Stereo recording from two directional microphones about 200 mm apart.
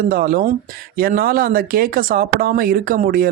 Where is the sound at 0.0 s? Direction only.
45° right (ahead or behind).